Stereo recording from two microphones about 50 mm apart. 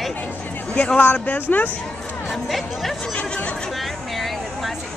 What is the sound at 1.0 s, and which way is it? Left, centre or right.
Speech, left.